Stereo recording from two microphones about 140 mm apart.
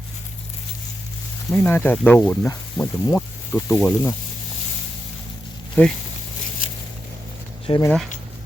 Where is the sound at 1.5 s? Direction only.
15° left (ahead or behind).